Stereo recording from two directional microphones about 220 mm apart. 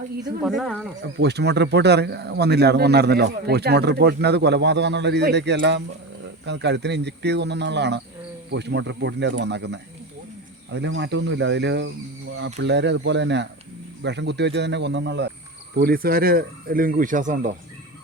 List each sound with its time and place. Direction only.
0.4 s speech: centre (ahead or behind)
1.2 s speech: 50° right (ahead or behind)